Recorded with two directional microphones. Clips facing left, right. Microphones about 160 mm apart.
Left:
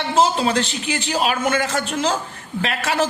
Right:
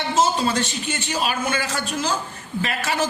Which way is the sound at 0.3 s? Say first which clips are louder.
Left 2 dB; 65° left (ahead or behind).